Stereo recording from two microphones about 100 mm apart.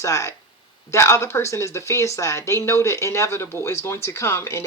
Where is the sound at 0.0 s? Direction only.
30° left (ahead or behind).